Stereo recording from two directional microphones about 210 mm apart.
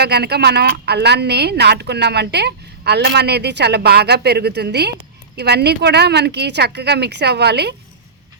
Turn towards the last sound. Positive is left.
turn(degrees=-50)  # may be behind; listen again after turning